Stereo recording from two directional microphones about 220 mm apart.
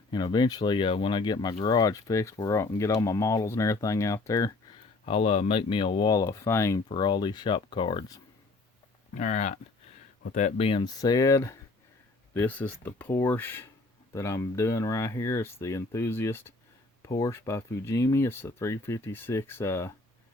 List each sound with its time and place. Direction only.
0.1 s speech: 20° left (ahead or behind)
5.0 s speech: 25° left (ahead or behind)
9.1 s speech: 35° left (ahead or behind); by 19.9 s 10° left (ahead or behind)